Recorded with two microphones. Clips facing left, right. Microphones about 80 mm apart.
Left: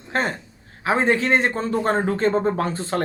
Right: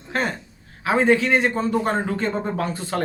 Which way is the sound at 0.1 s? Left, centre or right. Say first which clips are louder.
Left 1 dB; left.